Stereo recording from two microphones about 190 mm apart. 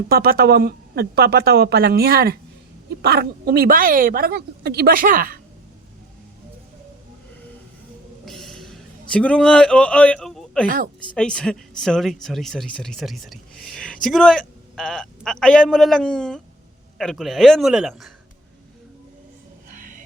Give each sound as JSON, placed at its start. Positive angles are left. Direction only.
{"t": 0.1, "sound": "speech", "side_deg": -55}
{"t": 8.2, "sound": "a sound", "side_deg": 0}
{"t": 11.1, "sound": "speech", "side_deg": 5}
{"t": 19.7, "sound": "music", "side_deg": -45}